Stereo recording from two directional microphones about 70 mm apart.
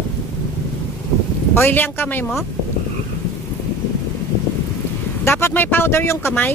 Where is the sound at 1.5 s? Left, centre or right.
Left.